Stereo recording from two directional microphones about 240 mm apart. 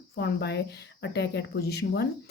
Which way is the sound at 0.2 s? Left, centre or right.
Left.